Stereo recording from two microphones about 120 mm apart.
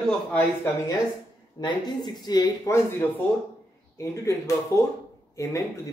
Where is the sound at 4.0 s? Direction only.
25° left (ahead or behind).